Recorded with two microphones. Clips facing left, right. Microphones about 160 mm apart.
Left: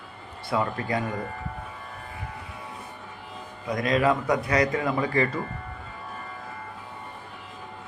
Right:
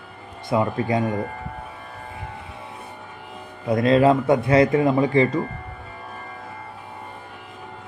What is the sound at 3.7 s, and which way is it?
A man's voice, 30° right (ahead or behind).